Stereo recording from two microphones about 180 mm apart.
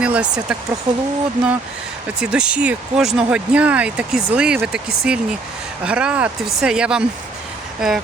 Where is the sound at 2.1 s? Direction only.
5° right (ahead or behind).